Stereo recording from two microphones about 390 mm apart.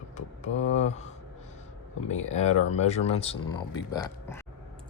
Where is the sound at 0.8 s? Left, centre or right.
Centre.